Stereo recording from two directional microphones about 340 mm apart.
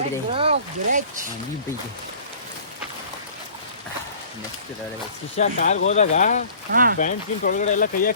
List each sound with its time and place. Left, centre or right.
0.3 s speech: centre
5.4 s speech: left
6.7 s speech: right
7.0 s speech: left